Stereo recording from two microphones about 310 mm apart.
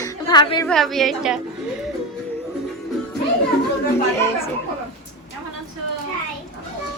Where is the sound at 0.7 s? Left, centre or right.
Centre.